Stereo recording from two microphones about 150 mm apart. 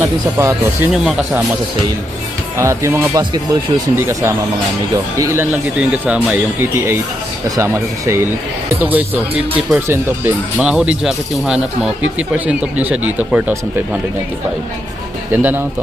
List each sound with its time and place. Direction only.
0.0 s speech: 15° right (ahead or behind)
0.9 s speech: centre (ahead or behind)
2.6 s speech: 20° right (ahead or behind)
15.3 s speech: 10° right (ahead or behind)